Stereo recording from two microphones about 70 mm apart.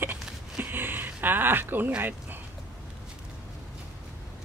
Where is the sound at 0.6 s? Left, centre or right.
Right.